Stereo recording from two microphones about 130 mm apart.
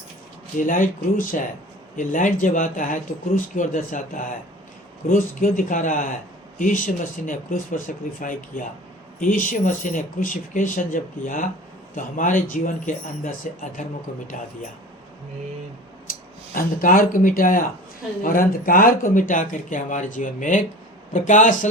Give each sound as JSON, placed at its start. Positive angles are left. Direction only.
{"t": 0.6, "sound": "speech", "side_deg": 90}
{"t": 16.6, "sound": "speech", "side_deg": 90}
{"t": 21.1, "sound": "a man's voice", "side_deg": 75}